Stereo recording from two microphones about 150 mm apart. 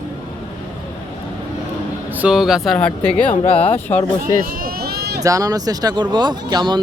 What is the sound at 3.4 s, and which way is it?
Speech, 40° left (ahead or behind).